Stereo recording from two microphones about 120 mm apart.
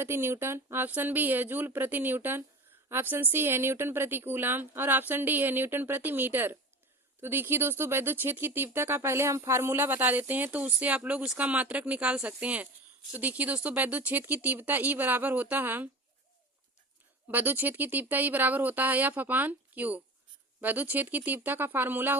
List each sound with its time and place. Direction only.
0.0 s speech: 20° right (ahead or behind)
17.2 s speech: 15° right (ahead or behind)